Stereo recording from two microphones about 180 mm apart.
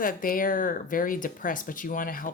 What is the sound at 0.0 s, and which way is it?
Speech, 50° left (ahead or behind).